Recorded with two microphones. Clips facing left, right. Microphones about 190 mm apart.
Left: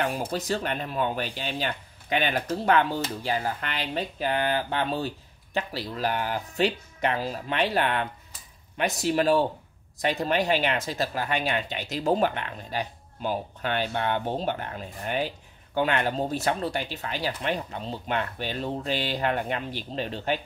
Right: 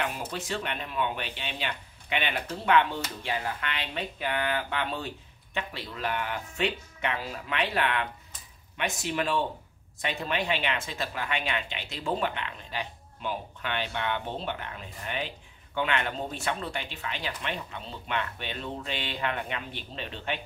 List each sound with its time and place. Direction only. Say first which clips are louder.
0.3 s speech: left 5 dB; 40° left (ahead or behind)